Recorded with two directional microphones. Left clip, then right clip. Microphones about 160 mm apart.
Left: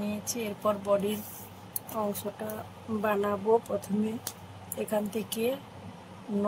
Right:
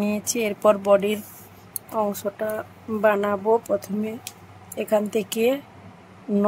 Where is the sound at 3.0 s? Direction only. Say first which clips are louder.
Right 9 dB; 80° right.